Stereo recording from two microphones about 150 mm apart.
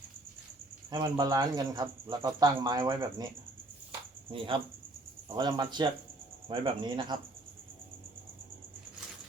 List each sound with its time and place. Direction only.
0.9 s speech: 25° right (ahead or behind)
4.3 s speech: 35° right (ahead or behind)